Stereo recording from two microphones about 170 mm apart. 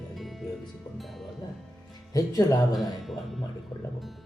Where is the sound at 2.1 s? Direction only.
20° left (ahead or behind).